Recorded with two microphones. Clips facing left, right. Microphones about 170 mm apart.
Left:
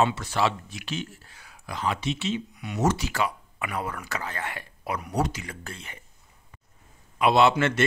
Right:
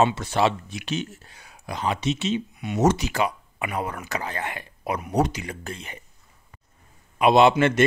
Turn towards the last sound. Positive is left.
turn(degrees=-15)  # may be behind; listen again after turning